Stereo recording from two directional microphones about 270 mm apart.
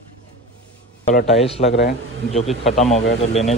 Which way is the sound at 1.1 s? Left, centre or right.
Left.